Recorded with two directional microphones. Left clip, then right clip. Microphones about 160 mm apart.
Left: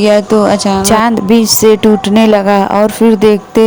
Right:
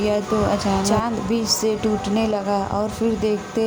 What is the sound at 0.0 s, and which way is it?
A woman's voice, 50° left (ahead or behind).